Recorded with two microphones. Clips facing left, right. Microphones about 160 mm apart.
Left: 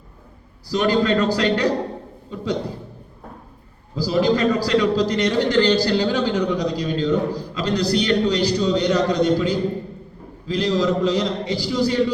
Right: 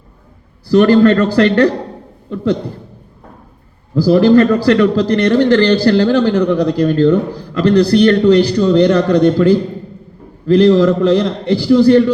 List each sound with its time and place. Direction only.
0.7 s a man's voice: 60° right (ahead or behind)
3.9 s a man's voice: 60° right (ahead or behind)